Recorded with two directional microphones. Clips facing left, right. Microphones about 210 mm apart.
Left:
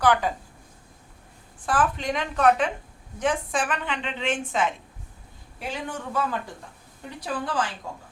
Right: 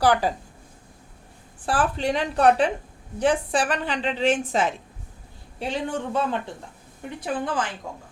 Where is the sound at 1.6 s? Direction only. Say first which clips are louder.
Right 1 dB; 30° right (ahead or behind).